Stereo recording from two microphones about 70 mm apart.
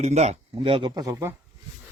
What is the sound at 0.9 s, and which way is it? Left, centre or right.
Speech, right.